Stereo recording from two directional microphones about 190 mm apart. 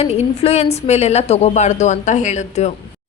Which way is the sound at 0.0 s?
30° left (ahead or behind).